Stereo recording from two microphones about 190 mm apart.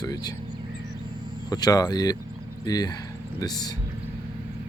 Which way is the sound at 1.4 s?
20° left (ahead or behind).